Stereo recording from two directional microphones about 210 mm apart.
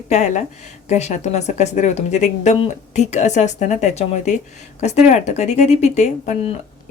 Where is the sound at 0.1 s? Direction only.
35° left (ahead or behind).